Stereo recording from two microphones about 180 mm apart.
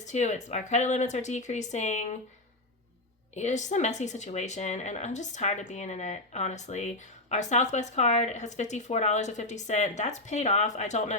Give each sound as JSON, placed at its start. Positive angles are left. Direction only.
{"t": 0.0, "sound": "speech", "side_deg": 40}
{"t": 3.3, "sound": "speech", "side_deg": 40}